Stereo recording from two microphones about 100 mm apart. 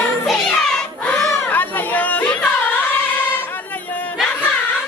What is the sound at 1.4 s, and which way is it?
Chatter, 15° left (ahead or behind).